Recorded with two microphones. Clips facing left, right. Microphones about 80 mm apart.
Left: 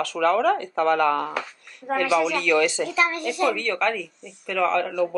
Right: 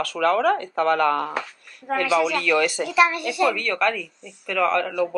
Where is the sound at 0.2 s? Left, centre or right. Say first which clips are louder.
Even; centre.